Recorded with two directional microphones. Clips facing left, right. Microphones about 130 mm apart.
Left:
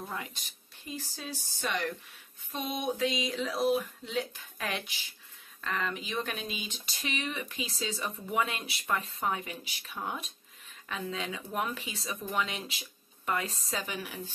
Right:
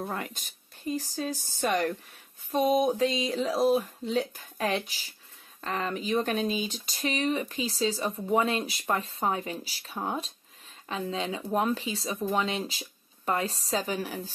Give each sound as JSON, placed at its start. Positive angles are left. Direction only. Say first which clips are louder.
{"t": 0.0, "sound": "speech", "louder": "right 5 dB", "side_deg": -55}